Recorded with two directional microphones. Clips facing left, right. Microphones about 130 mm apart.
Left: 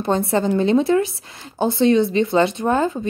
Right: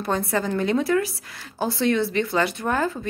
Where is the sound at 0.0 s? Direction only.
25° left (ahead or behind).